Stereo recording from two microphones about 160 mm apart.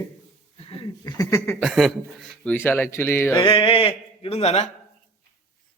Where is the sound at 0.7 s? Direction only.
35° left (ahead or behind).